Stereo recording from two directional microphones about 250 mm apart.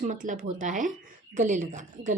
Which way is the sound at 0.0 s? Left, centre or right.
Right.